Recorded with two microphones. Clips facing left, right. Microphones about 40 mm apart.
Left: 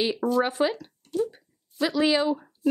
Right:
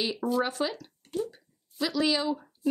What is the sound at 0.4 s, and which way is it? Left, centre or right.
Speech, left.